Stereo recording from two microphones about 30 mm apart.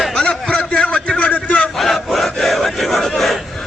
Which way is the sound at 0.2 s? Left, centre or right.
Left.